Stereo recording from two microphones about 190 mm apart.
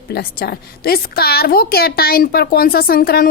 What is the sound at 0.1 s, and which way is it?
A woman's voice, 55° left (ahead or behind).